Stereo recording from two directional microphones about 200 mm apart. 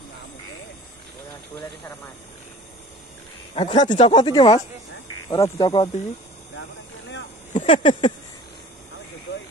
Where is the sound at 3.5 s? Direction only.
35° left (ahead or behind).